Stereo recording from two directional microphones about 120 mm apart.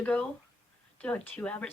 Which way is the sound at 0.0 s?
10° left (ahead or behind).